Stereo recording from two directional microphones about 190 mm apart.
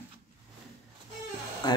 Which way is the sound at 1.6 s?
20° left (ahead or behind).